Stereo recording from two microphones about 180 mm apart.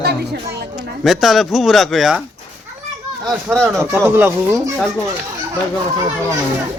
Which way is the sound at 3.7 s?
15° right (ahead or behind).